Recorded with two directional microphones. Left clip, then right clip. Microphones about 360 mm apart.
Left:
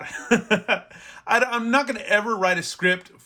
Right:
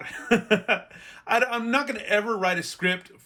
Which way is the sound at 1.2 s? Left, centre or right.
Centre.